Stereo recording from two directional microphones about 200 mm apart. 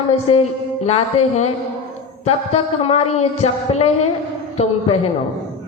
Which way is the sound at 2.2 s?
30° left (ahead or behind).